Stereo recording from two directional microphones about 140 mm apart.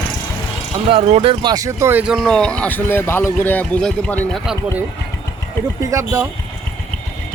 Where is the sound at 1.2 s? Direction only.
35° right (ahead or behind).